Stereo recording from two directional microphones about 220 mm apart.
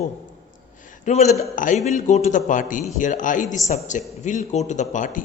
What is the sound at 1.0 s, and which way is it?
A man's voice, 30° left (ahead or behind).